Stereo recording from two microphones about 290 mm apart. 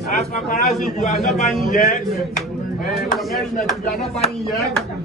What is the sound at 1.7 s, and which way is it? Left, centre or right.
Speech, left.